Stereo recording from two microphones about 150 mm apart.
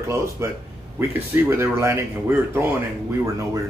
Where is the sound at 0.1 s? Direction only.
20° right (ahead or behind).